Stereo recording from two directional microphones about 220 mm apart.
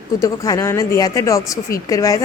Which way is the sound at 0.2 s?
15° left (ahead or behind).